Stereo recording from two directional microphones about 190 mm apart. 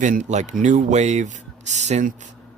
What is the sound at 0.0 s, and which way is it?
Speech, 40° right (ahead or behind).